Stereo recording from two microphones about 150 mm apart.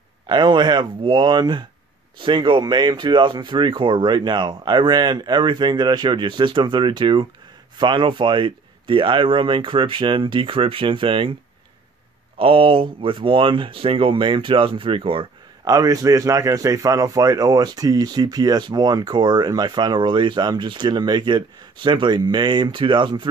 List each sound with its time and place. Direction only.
0.3 s speech: 30° right (ahead or behind)
12.4 s speech: 35° right (ahead or behind)
15.6 s speech: 25° right (ahead or behind)